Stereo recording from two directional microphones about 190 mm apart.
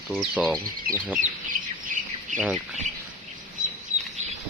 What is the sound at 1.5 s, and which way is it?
Bird, 45° right (ahead or behind).